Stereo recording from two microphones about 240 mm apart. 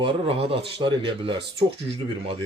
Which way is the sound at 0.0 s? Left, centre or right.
Right.